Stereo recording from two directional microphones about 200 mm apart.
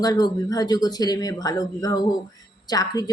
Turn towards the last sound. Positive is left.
turn(degrees=20)  # may be behind; listen again after turning